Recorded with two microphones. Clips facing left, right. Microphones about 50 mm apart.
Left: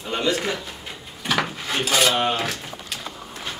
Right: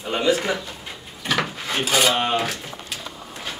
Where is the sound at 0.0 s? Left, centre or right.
Centre.